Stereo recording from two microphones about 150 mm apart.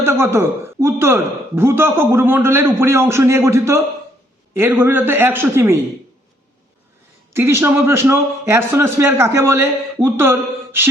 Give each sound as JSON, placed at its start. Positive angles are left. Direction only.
{"t": 0.0, "sound": "a man's voice", "side_deg": -15}
{"t": 7.3, "sound": "a man's voice", "side_deg": -15}